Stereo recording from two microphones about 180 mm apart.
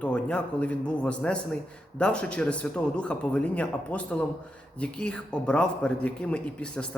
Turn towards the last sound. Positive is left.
turn(degrees=5)  # may be behind; listen again after turning